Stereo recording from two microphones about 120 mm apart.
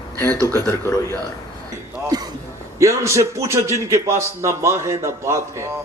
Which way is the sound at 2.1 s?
35° right (ahead or behind).